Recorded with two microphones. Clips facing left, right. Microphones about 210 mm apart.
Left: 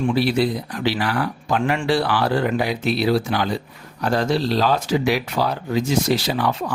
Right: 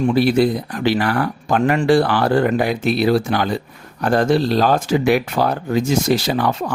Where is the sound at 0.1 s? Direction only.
50° right (ahead or behind).